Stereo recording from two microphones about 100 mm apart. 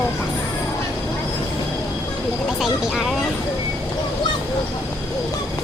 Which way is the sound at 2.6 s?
Centre (ahead or behind).